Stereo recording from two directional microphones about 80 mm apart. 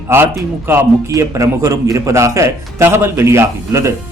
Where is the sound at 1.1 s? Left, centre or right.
Right.